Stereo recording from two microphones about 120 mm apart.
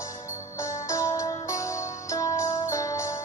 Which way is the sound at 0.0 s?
25° left (ahead or behind).